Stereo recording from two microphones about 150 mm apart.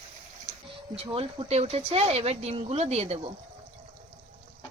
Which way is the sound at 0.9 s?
40° right (ahead or behind).